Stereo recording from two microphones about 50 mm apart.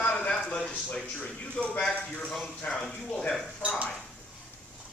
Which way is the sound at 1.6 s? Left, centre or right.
Left.